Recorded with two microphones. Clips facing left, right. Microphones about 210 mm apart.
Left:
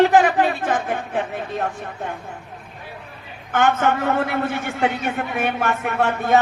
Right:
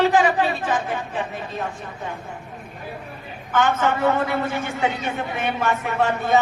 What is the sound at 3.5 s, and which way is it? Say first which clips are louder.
Speech: left 2 dB; 55° left (ahead or behind).